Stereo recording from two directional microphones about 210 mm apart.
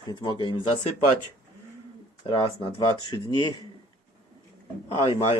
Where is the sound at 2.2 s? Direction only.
25° left (ahead or behind).